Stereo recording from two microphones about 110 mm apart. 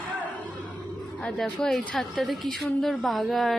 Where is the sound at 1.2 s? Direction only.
5° left (ahead or behind).